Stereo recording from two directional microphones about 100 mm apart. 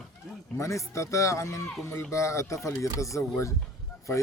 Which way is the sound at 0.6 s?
30° left (ahead or behind).